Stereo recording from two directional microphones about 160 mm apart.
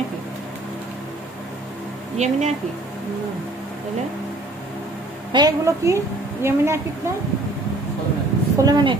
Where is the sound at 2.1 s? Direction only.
45° right (ahead or behind).